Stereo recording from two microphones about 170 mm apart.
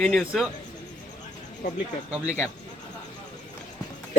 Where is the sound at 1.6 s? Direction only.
65° left (ahead or behind).